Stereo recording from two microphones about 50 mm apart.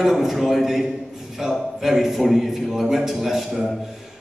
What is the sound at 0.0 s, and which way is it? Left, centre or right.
A man's voice, centre.